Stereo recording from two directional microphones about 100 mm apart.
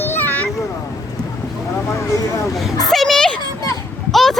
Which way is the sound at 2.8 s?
Centre (ahead or behind).